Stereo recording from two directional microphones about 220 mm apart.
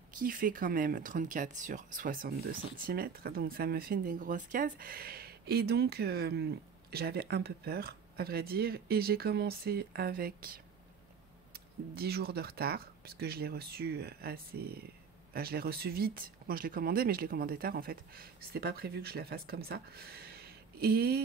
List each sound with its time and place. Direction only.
0.2 s speech: 40° right (ahead or behind)